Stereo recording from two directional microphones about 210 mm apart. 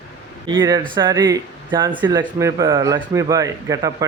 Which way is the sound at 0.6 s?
20° right (ahead or behind).